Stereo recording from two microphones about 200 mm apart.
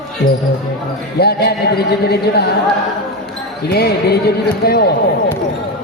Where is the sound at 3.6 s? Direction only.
55° left (ahead or behind).